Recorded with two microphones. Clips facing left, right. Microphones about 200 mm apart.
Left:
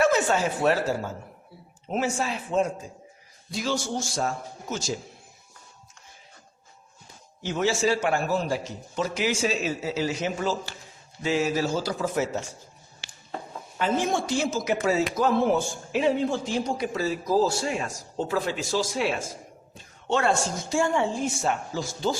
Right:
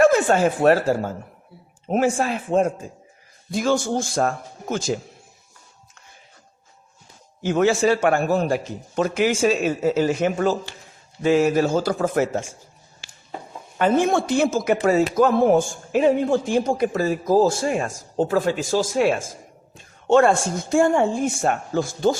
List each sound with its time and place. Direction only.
0.0 s a man's voice: 50° right (ahead or behind)
7.4 s a man's voice: 55° right (ahead or behind)
13.7 s a man's voice: 55° right (ahead or behind)